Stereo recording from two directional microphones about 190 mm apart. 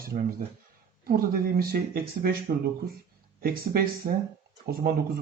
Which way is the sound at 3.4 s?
50° right (ahead or behind).